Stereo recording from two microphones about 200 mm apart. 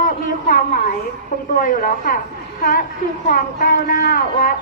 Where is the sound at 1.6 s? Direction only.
40° left (ahead or behind).